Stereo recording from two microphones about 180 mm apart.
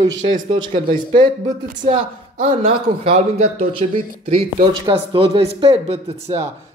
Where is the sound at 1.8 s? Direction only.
30° right (ahead or behind).